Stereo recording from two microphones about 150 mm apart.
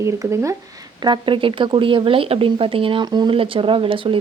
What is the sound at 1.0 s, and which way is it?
Speech, 35° right (ahead or behind).